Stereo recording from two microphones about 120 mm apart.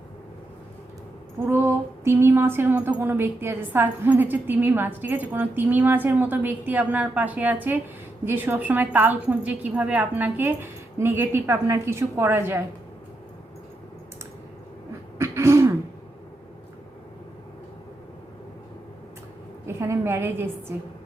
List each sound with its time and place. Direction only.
1.5 s a sound: 20° right (ahead or behind)
15.2 s throat clearing: 25° right (ahead or behind)
19.6 s a woman's voice: 20° right (ahead or behind)